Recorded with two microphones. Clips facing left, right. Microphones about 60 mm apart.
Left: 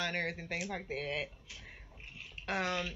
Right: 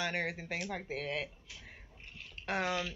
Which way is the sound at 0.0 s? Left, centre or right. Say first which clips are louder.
Right 1 dB; centre.